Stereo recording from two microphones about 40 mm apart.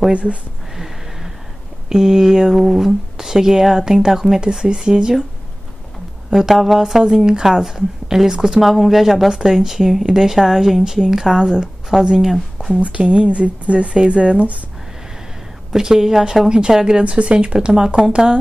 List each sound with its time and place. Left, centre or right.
0.1 s speech: right
1.9 s a woman's voice: centre
6.3 s a woman's voice: centre
12.7 s speech: right
15.7 s a woman's voice: centre
17.0 s speech: right
17.5 s a woman's voice: centre